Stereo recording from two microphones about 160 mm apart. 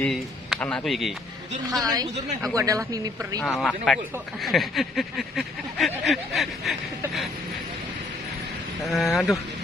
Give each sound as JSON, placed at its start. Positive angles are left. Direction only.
{"t": 0.0, "sound": "speech", "side_deg": 5}
{"t": 1.7, "sound": "speech", "side_deg": -20}
{"t": 3.4, "sound": "speech", "side_deg": 0}
{"t": 8.9, "sound": "speech", "side_deg": 0}